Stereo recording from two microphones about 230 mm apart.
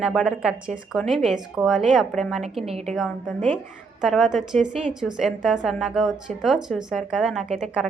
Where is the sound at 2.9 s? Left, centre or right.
Centre.